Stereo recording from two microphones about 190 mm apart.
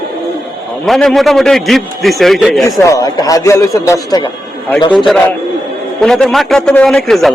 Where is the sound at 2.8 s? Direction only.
20° left (ahead or behind).